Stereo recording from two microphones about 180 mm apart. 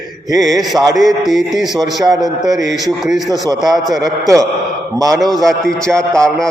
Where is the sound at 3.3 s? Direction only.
20° right (ahead or behind).